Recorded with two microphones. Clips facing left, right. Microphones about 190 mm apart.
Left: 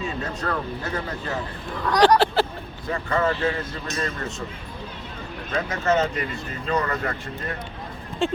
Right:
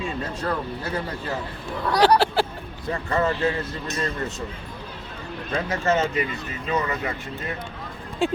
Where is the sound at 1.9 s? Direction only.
10° right (ahead or behind).